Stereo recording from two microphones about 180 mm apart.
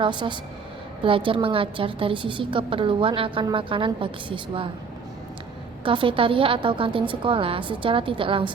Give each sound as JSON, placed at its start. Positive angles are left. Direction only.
{"t": 0.0, "sound": "a woman's voice", "side_deg": -25}
{"t": 5.8, "sound": "a woman's voice", "side_deg": -30}